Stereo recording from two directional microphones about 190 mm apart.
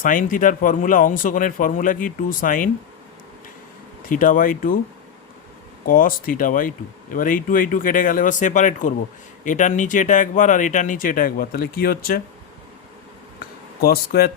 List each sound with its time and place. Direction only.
0.0 s speech: 45° left (ahead or behind)
4.1 s speech: 45° left (ahead or behind)
5.8 s speech: 45° left (ahead or behind)
13.4 s a sound: 50° left (ahead or behind)